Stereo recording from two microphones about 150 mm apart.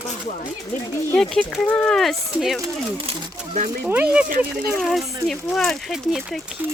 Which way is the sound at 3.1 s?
45° right (ahead or behind).